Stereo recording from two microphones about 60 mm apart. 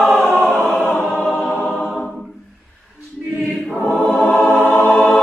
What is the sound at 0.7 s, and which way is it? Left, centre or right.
Choir, left.